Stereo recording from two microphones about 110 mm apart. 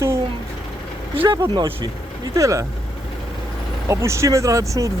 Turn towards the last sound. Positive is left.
turn(degrees=-30)  # may be behind; listen again after turning